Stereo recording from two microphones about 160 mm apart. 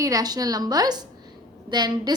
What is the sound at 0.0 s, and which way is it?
A woman's voice, 20° right (ahead or behind).